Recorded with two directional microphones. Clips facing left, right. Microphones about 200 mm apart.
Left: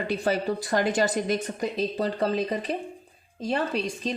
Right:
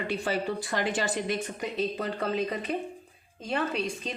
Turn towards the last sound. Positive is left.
turn(degrees=35)  # may be behind; listen again after turning